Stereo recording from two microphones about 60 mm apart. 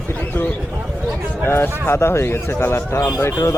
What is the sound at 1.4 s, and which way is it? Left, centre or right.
A man's voice, left.